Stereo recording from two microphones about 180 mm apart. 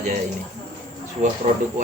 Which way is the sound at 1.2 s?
40° right (ahead or behind).